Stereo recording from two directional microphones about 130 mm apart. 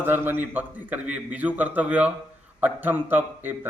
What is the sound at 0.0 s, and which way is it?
A man's voice, 15° right (ahead or behind).